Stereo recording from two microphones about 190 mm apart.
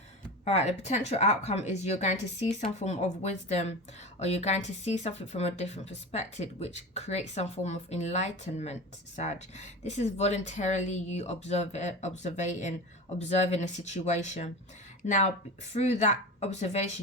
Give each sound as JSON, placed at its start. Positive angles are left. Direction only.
{"t": 0.4, "sound": "speech", "side_deg": 35}